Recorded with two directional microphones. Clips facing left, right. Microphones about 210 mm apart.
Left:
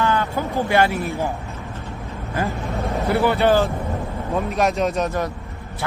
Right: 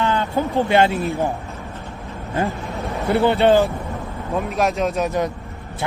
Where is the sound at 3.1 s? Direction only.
20° right (ahead or behind).